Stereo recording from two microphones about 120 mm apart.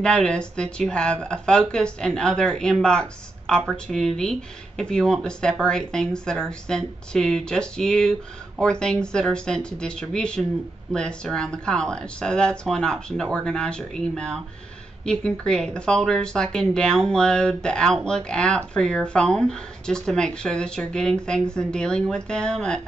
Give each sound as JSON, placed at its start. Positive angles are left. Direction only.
{"t": 0.0, "sound": "speech", "side_deg": 5}